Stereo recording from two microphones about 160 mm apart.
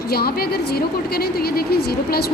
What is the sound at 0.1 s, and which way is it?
A woman's voice, 70° left (ahead or behind).